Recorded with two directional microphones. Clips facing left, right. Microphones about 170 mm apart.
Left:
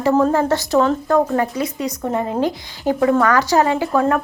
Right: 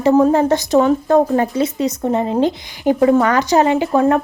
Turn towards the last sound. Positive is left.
turn(degrees=-20)  # may be behind; listen again after turning